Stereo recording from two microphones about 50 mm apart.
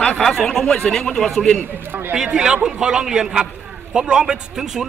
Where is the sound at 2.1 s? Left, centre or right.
Centre.